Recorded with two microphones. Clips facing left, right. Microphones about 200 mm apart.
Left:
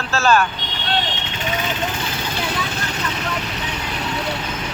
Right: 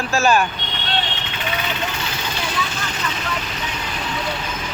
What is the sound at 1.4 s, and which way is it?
Vehicle, 45° left (ahead or behind).